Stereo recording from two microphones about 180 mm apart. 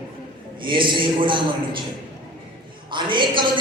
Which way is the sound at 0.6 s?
25° right (ahead or behind).